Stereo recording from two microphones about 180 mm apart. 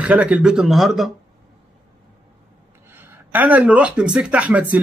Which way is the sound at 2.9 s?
10° right (ahead or behind).